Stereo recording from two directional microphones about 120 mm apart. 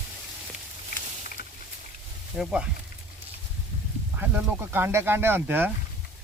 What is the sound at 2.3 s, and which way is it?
Speech, 5° right (ahead or behind).